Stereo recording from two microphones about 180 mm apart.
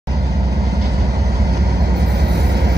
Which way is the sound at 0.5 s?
60° right (ahead or behind).